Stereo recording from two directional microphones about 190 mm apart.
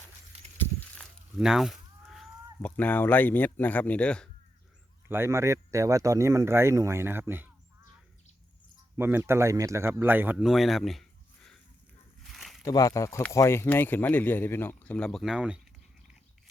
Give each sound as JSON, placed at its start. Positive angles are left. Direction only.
{"t": 0.3, "sound": "a sound", "side_deg": -35}
{"t": 1.4, "sound": "speech", "side_deg": 0}
{"t": 5.0, "sound": "speech", "side_deg": -10}
{"t": 9.0, "sound": "speech", "side_deg": -10}
{"t": 12.3, "sound": "a sound", "side_deg": 0}
{"t": 12.6, "sound": "speech", "side_deg": 20}